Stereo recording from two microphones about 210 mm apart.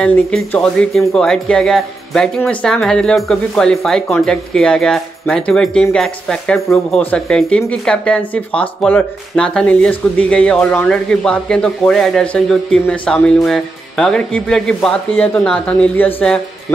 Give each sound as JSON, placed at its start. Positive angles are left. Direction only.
{"t": 0.0, "sound": "speech", "side_deg": 5}